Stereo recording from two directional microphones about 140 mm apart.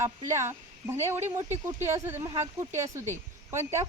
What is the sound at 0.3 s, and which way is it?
Speech, 20° right (ahead or behind).